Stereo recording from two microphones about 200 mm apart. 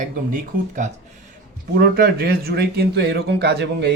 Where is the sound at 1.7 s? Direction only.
50° right (ahead or behind).